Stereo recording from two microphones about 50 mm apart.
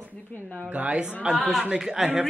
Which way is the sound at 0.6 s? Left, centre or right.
Right.